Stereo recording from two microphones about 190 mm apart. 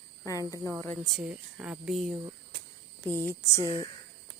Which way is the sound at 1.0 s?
5° right (ahead or behind).